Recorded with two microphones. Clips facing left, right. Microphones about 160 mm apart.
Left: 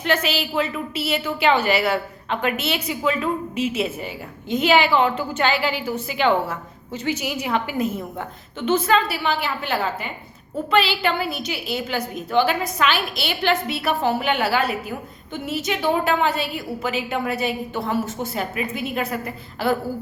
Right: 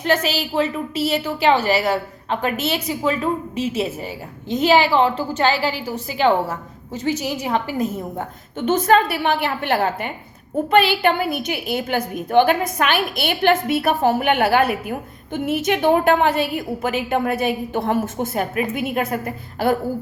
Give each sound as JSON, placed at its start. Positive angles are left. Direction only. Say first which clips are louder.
{"t": 0.0, "sound": "a woman's voice", "louder": "right 2 dB", "side_deg": -40}